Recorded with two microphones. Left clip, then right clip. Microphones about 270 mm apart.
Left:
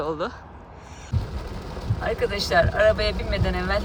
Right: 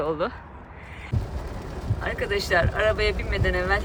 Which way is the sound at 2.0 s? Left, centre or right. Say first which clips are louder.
Left 2 dB; centre.